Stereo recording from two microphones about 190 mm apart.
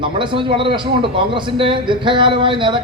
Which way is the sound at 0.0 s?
25° right (ahead or behind).